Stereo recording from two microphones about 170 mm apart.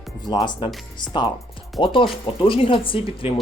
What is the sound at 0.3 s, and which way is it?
Speech, 25° left (ahead or behind).